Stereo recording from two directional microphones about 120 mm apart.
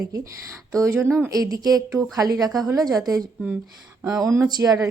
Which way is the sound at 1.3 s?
30° right (ahead or behind).